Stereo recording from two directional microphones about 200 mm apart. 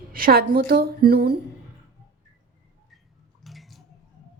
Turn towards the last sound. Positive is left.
turn(degrees=0)  # may be behind; listen again after turning